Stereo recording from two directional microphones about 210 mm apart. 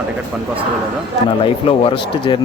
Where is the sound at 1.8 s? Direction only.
25° left (ahead or behind).